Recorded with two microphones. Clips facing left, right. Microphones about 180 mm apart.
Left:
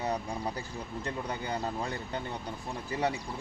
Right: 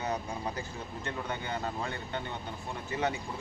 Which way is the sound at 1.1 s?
35° left (ahead or behind).